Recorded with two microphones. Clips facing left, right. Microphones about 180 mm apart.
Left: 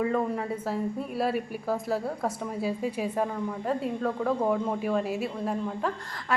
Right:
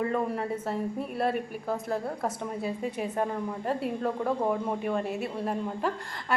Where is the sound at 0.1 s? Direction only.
Centre (ahead or behind).